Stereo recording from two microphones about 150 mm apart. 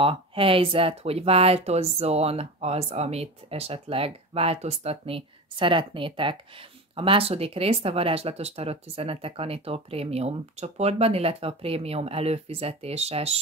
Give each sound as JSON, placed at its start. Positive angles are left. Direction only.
{"t": 0.0, "sound": "speech", "side_deg": -35}